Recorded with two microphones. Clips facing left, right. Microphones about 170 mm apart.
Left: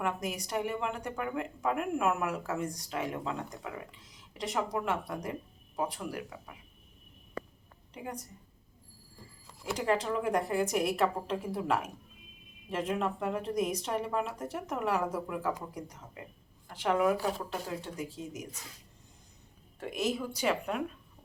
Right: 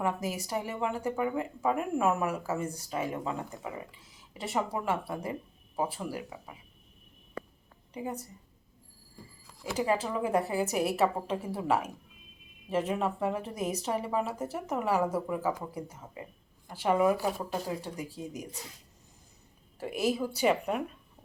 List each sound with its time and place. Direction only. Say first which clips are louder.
0.0 s speech: right 2 dB; 5° right (ahead or behind)
9.7 s a woman's voice: right 1 dB; 5° right (ahead or behind)
19.8 s a woman's voice: right 3 dB; 10° right (ahead or behind)